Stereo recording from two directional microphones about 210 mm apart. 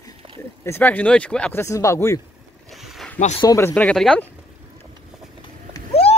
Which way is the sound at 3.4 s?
10° left (ahead or behind).